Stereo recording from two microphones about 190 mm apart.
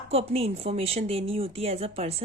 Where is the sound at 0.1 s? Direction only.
30° right (ahead or behind).